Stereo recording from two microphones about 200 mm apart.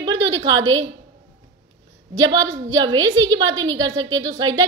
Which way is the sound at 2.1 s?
15° right (ahead or behind).